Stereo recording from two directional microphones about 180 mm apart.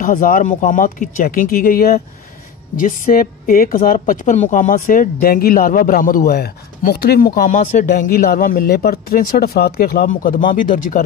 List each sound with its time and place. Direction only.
0.0 s speech: 50° left (ahead or behind)